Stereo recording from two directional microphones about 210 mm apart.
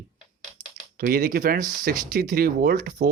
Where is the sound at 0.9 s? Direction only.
45° right (ahead or behind).